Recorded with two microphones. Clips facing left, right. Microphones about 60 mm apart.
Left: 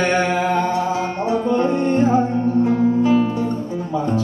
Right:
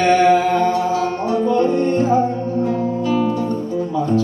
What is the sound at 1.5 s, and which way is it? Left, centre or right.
Music, left.